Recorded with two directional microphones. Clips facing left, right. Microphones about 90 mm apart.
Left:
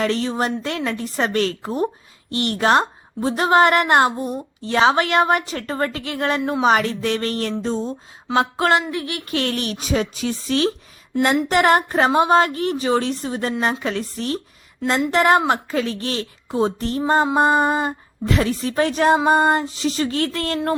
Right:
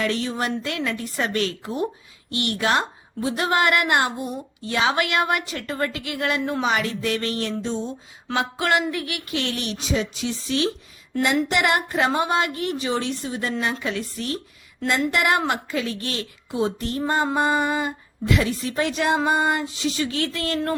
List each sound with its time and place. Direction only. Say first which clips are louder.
0.0 s a woman's voice: left 4 dB; 35° left (ahead or behind)